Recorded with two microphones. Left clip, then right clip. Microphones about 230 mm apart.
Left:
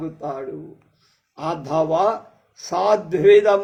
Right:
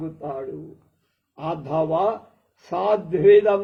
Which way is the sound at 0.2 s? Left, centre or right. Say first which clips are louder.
Left 2 dB; left.